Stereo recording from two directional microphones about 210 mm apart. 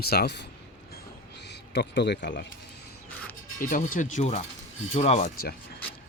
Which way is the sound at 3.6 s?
40° left (ahead or behind).